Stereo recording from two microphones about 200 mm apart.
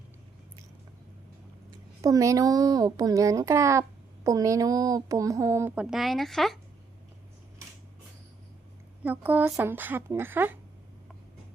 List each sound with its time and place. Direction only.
2.0 s a child's voice: 15° right (ahead or behind); by 6.6 s centre (ahead or behind)
9.0 s a child's voice: 10° right (ahead or behind)